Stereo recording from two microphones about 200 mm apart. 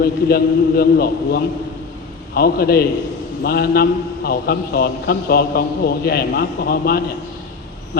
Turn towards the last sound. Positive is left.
turn(degrees=50)  # may be behind; listen again after turning